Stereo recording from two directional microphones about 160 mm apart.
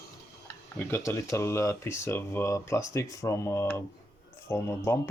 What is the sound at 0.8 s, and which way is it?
Speech, 15° left (ahead or behind).